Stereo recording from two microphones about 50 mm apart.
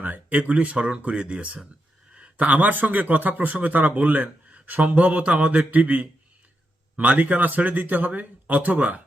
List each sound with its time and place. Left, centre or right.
0.0 s a man's voice: right